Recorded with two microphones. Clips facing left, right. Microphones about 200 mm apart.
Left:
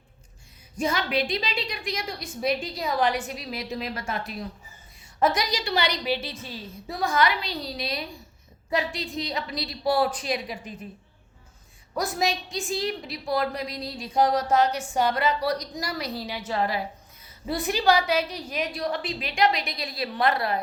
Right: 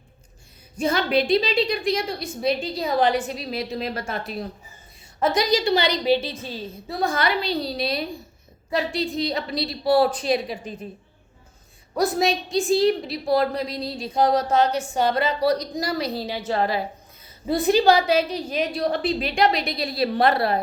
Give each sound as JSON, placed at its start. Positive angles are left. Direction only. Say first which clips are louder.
{"t": 0.8, "sound": "a woman's voice", "louder": "right 5 dB", "side_deg": -30}
{"t": 11.9, "sound": "a woman's voice", "louder": "right 5 dB", "side_deg": -30}